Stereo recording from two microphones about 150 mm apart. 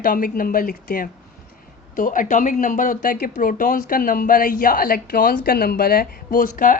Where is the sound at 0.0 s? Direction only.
70° left (ahead or behind).